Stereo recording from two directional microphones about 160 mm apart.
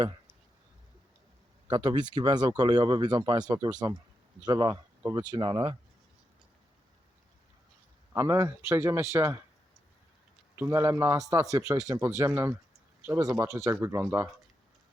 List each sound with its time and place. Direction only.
1.6 s speech: 30° right (ahead or behind)
8.1 s a man's voice: 20° right (ahead or behind)
10.5 s a man's voice: 15° right (ahead or behind)